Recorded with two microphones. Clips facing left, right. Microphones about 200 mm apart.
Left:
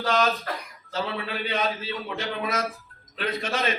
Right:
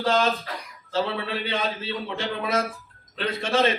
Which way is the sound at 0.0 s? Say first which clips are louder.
Right 1 dB; 30° right (ahead or behind).